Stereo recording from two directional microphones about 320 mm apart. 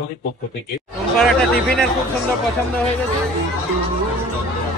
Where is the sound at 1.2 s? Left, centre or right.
Centre.